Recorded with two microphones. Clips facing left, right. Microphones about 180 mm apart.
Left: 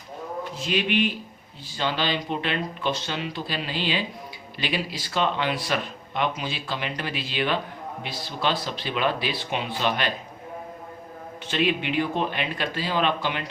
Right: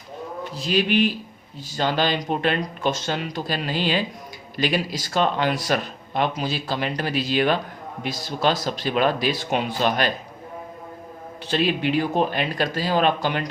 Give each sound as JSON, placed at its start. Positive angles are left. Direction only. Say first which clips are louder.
{"t": 0.5, "sound": "speech", "louder": "right 4 dB", "side_deg": -35}
{"t": 11.4, "sound": "speech", "louder": "right 3 dB", "side_deg": -35}